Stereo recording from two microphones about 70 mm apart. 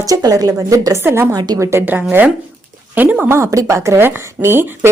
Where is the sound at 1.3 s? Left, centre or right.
Right.